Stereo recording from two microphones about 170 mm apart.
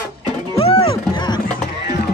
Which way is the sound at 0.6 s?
35° left (ahead or behind).